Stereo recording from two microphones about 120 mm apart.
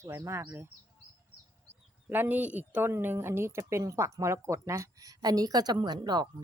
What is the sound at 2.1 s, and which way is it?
A woman's voice, 15° right (ahead or behind).